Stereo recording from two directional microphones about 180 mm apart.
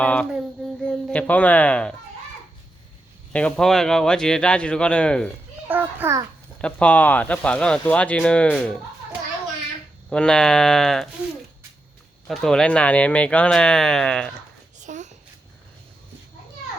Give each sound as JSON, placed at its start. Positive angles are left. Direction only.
{"t": 0.0, "sound": "speech", "side_deg": 5}
{"t": 3.3, "sound": "speech", "side_deg": 5}
{"t": 5.6, "sound": "a child's voice", "side_deg": -10}
{"t": 6.6, "sound": "speech", "side_deg": 5}
{"t": 10.1, "sound": "speech", "side_deg": 5}
{"t": 12.3, "sound": "speech", "side_deg": 5}
{"t": 14.8, "sound": "a sound", "side_deg": -40}